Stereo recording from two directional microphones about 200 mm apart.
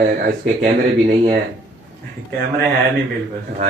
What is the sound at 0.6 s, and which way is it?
Speech, 40° right (ahead or behind).